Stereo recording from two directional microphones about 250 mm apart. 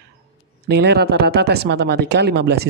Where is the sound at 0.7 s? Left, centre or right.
Right.